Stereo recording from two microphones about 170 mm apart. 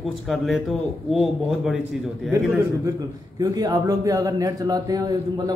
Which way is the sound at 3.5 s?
25° right (ahead or behind).